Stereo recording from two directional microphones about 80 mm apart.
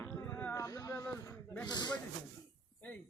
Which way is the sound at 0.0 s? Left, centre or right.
Left.